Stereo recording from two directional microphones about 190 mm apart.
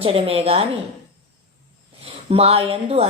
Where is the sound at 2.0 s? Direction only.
30° right (ahead or behind).